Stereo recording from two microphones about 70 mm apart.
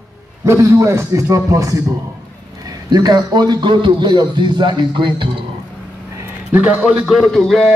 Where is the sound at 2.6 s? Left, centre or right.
Right.